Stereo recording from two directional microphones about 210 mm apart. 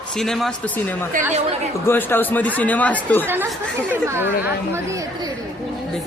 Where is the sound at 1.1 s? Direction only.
40° right (ahead or behind).